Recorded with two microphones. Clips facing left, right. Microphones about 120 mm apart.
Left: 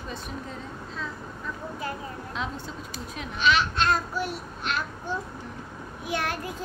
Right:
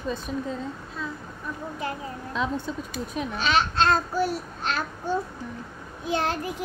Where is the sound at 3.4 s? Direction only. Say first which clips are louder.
Even; 35° right (ahead or behind).